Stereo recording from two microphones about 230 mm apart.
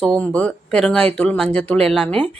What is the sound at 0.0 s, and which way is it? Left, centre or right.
Speech, centre.